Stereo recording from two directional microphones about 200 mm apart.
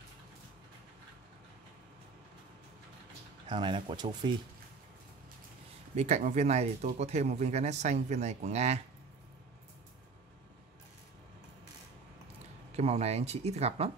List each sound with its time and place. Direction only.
3.4 s speech: 25° right (ahead or behind)
5.9 s speech: 35° right (ahead or behind)
12.7 s speech: 35° right (ahead or behind)